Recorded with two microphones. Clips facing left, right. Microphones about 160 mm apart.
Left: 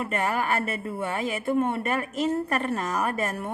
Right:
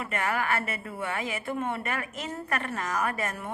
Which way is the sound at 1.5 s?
40° left (ahead or behind).